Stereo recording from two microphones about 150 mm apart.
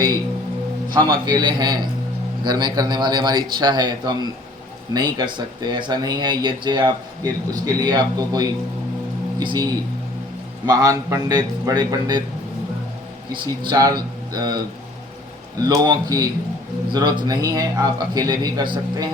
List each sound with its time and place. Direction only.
0.9 s speech: 30° right (ahead or behind)
10.7 s speech: 25° right (ahead or behind)
13.3 s speech: 30° right (ahead or behind)
15.6 s speech: 25° right (ahead or behind)